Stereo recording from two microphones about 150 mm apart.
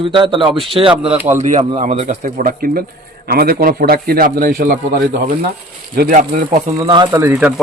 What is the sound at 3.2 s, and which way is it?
A man's voice, 90° right.